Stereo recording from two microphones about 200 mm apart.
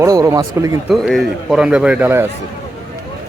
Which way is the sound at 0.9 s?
Centre (ahead or behind).